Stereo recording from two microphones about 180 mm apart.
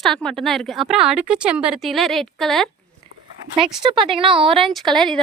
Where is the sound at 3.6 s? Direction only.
30° right (ahead or behind).